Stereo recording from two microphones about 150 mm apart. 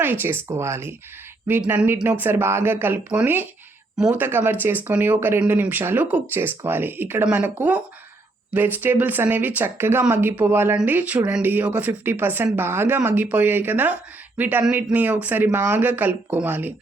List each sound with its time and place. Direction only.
0.0 s speech: 15° right (ahead or behind)